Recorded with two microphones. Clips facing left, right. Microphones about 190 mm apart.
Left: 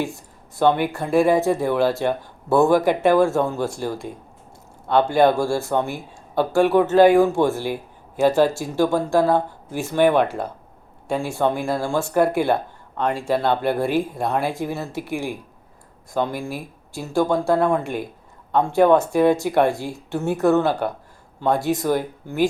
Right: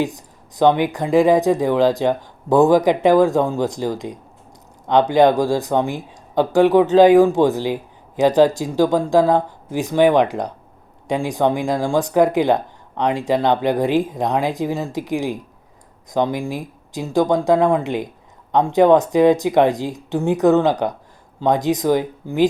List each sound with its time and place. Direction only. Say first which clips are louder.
0.6 s speech: right 3 dB; 15° right (ahead or behind)